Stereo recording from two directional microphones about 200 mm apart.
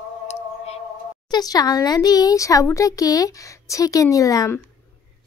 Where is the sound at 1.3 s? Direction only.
20° left (ahead or behind).